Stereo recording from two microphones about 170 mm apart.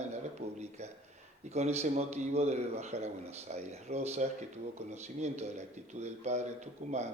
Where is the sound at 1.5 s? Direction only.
40° right (ahead or behind).